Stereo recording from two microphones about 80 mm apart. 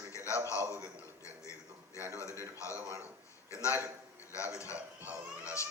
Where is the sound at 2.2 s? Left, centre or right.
Left.